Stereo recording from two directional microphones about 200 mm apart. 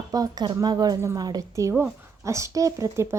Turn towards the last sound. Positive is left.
turn(degrees=-15)  # may be behind; listen again after turning